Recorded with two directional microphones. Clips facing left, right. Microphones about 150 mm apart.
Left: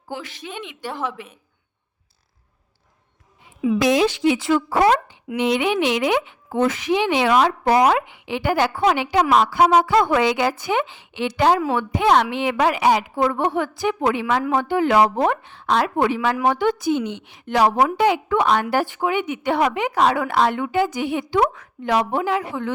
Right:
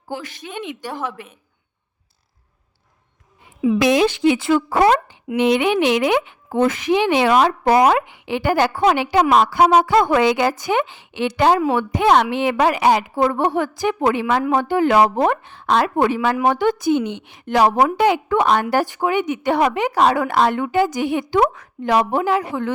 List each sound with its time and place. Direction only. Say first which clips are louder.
0.1 s speech: right 2 dB; 45° right (ahead or behind)
3.8 s speech: right 1 dB; 65° right (ahead or behind); by 13.1 s 50° right (ahead or behind)
13.1 s a woman's voice: right 2 dB; 35° right (ahead or behind); by 21.4 s 50° right (ahead or behind)
21.5 s a woman's voice: right 3 dB; 40° right (ahead or behind)